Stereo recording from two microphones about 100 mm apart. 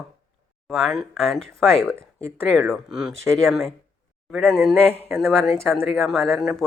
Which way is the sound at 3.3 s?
20° right (ahead or behind).